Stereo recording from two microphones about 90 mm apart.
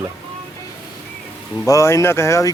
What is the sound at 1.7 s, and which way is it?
Speech, 35° left (ahead or behind).